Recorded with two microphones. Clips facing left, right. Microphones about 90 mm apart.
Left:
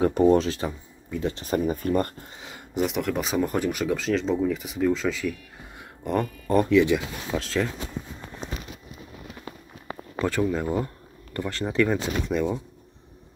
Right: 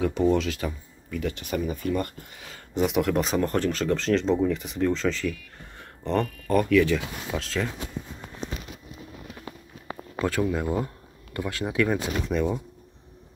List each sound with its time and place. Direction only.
0.0 s speech: 40° left (ahead or behind)
2.7 s speech: centre (ahead or behind)
5.8 s a sound: 10° left (ahead or behind)
6.5 s speech: 25° left (ahead or behind)
7.2 s speech: centre (ahead or behind)
10.1 s speech: centre (ahead or behind)